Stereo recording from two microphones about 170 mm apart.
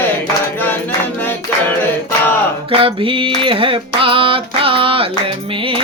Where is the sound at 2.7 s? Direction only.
30° right (ahead or behind).